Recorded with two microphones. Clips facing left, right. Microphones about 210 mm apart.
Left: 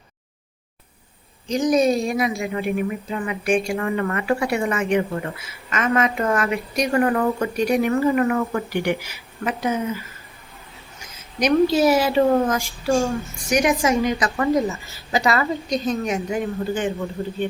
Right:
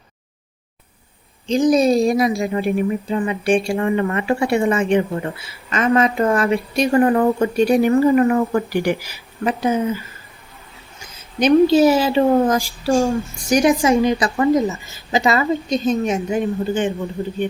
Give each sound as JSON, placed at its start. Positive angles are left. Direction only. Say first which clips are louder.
{"t": 1.5, "sound": "speech", "louder": "right 3 dB", "side_deg": -30}
{"t": 11.0, "sound": "a woman's voice", "louder": "right 4 dB", "side_deg": -30}